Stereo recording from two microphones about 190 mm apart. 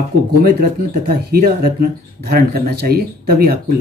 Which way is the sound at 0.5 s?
50° right (ahead or behind).